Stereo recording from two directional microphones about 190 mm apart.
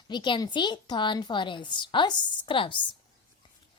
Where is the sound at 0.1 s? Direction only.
25° left (ahead or behind).